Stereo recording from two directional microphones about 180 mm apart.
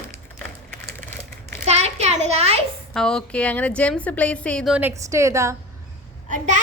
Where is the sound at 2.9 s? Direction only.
5° left (ahead or behind).